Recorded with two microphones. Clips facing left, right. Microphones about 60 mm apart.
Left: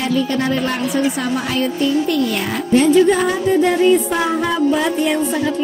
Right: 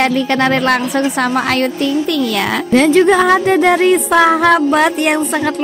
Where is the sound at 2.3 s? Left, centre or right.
Right.